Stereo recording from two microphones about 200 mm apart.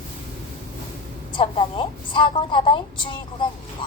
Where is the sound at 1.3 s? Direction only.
25° left (ahead or behind).